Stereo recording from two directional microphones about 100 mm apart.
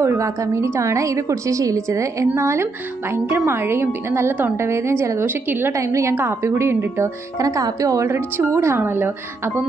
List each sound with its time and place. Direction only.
0.0 s a woman's voice: 30° right (ahead or behind)